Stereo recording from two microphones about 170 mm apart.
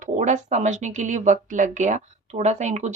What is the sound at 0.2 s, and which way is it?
Speech, 45° right (ahead or behind).